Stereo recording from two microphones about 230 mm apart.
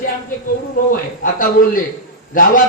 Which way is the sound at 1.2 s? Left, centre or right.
Left.